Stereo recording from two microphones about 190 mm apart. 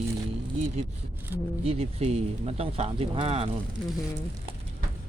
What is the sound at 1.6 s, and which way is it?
Speech, 35° right (ahead or behind).